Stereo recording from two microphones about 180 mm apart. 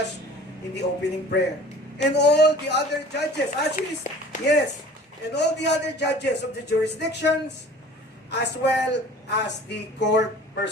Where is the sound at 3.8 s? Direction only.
45° left (ahead or behind).